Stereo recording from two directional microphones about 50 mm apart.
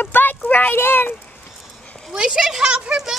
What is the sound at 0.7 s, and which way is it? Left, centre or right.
Speech, left.